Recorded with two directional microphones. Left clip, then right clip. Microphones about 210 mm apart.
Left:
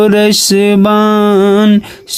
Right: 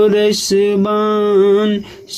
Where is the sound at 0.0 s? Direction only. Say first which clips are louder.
Left 4 dB; 45° left (ahead or behind).